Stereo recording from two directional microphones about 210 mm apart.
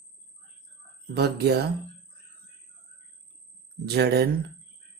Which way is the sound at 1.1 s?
50° right (ahead or behind).